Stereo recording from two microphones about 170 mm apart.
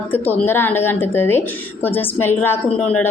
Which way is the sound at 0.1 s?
10° left (ahead or behind).